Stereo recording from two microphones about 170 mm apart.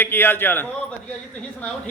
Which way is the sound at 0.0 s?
10° left (ahead or behind).